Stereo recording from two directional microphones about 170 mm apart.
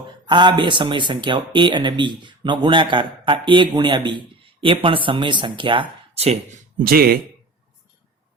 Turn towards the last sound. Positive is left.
turn(degrees=-60)  # may be behind; listen again after turning